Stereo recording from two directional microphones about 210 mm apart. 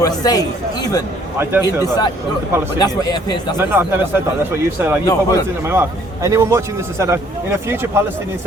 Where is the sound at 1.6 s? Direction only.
20° left (ahead or behind).